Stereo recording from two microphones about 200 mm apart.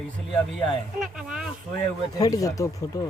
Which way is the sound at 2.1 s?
20° left (ahead or behind).